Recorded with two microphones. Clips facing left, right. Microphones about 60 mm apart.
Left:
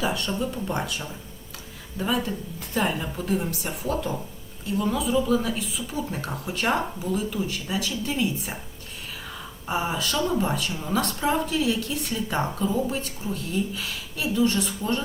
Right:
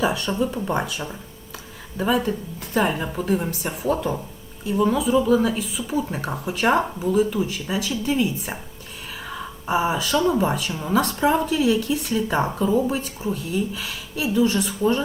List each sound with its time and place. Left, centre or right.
0.0 s speech: centre
9.6 s speech: centre
10.7 s speech: centre
10.9 s speech: centre